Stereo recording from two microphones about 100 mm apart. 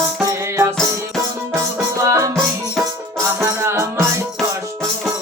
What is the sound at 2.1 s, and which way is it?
Music, 30° right (ahead or behind).